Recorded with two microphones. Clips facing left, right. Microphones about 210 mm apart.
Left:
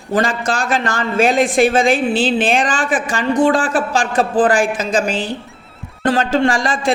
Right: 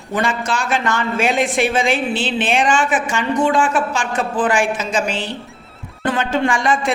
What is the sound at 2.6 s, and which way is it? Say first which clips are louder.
A man's voice: right 1 dB; 35° left (ahead or behind).